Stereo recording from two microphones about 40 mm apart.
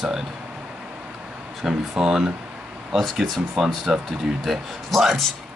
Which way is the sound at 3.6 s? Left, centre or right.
Centre.